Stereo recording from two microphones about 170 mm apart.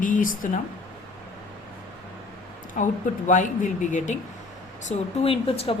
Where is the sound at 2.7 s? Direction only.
50° left (ahead or behind).